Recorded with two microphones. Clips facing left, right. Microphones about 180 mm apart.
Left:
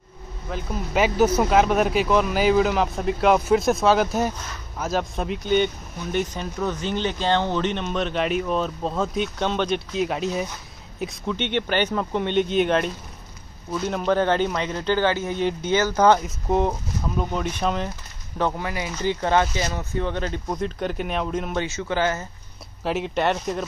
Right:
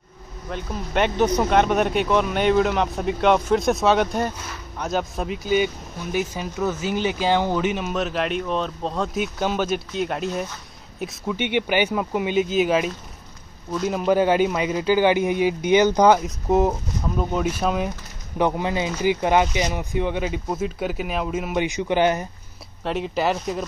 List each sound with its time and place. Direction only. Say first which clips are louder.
0.5 s speech: left 1 dB; centre (ahead or behind); by 16.2 s 15° right (ahead or behind)
16.2 s speech: right 3 dB; centre (ahead or behind)
18.4 s speech: right 4 dB; 20° right (ahead or behind); by 21.6 s 5° right (ahead or behind)
21.6 s speech: right 4 dB; 15° right (ahead or behind)
22.8 s speech: even; centre (ahead or behind)